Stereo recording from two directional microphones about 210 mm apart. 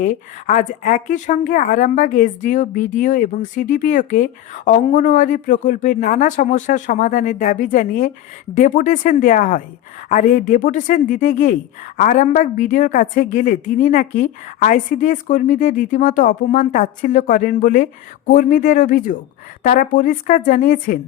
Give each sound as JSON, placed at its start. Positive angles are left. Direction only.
{"t": 0.0, "sound": "speech", "side_deg": 35}